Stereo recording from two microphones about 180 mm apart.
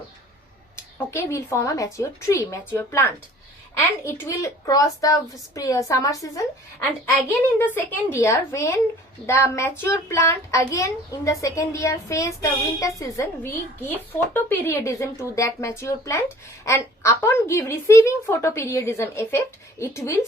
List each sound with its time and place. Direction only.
0.9 s a child's voice: 15° left (ahead or behind)